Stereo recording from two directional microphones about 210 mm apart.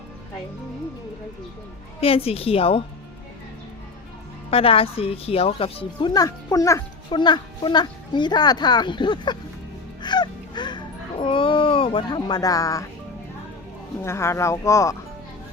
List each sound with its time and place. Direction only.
2.0 s speech: 25° left (ahead or behind)
4.5 s speech: 25° left (ahead or behind)
10.0 s music: 20° left (ahead or behind)
14.0 s speech: 10° left (ahead or behind)